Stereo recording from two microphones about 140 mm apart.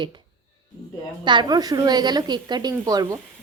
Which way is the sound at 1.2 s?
35° right (ahead or behind).